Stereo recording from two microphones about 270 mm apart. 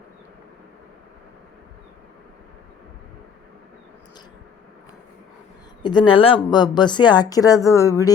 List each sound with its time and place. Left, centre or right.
5.8 s speech: centre